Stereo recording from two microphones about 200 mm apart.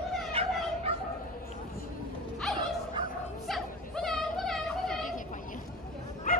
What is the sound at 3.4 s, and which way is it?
Music, centre (ahead or behind).